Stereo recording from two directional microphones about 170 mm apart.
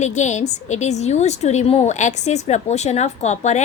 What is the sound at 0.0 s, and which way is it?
A woman's voice, 45° left (ahead or behind).